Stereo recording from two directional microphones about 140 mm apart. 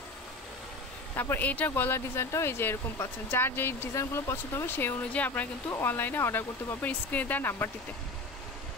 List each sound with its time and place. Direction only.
1.1 s speech: 15° left (ahead or behind)